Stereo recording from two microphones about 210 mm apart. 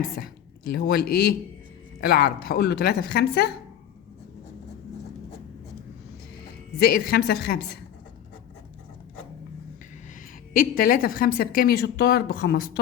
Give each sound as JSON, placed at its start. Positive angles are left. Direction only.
{"t": 0.7, "sound": "a woman's voice", "side_deg": 50}
{"t": 6.7, "sound": "a woman's voice", "side_deg": 45}
{"t": 10.5, "sound": "a woman's voice", "side_deg": 40}